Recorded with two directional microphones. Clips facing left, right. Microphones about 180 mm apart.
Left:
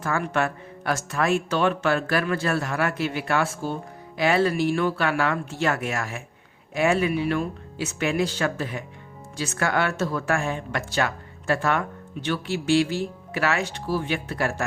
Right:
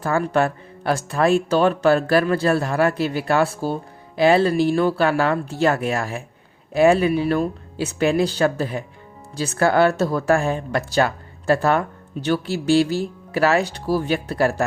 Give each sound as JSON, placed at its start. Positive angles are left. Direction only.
{"t": 0.0, "sound": "speech", "side_deg": -35}